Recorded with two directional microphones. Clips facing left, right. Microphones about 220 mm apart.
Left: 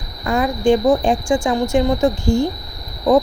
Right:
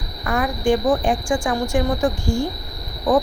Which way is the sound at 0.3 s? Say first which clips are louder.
Left 4 dB; 25° left (ahead or behind).